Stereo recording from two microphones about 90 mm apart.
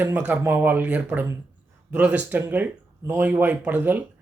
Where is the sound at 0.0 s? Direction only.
20° right (ahead or behind).